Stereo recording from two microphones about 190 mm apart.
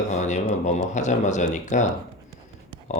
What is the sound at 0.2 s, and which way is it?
Speech, 40° left (ahead or behind).